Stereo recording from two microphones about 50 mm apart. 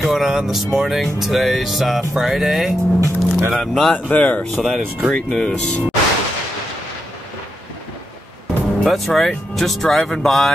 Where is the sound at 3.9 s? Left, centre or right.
Left.